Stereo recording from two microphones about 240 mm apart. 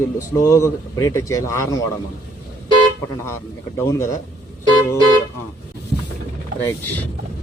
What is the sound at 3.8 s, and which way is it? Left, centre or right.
Speech, centre.